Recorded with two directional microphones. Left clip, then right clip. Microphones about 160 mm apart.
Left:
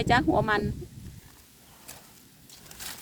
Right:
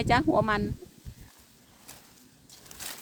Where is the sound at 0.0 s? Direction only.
15° right (ahead or behind).